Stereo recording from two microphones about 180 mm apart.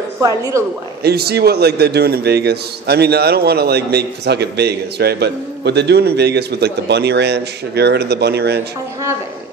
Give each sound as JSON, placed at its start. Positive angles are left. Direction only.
{"t": 0.2, "sound": "a woman's voice", "side_deg": -20}
{"t": 1.0, "sound": "a man's voice", "side_deg": -60}